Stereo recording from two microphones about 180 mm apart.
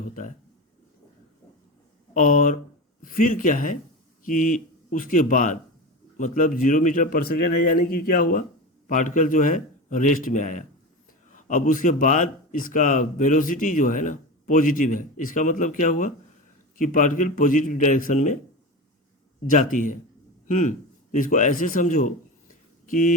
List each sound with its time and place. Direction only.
2.1 s speech: 45° left (ahead or behind)
19.5 s speech: 45° left (ahead or behind)